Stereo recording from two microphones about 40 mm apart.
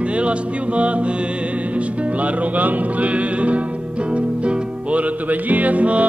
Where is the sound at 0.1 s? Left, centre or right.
Right.